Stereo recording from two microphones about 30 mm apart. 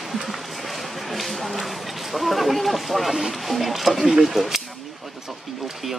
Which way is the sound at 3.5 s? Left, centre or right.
Centre.